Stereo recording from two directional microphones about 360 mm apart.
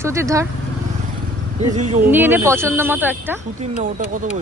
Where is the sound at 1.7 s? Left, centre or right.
Centre.